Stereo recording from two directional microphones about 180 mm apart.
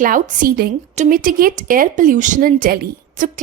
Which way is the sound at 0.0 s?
50° right (ahead or behind).